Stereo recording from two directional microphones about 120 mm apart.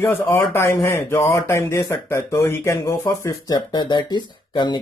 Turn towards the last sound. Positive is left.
turn(degrees=40)  # may be behind; listen again after turning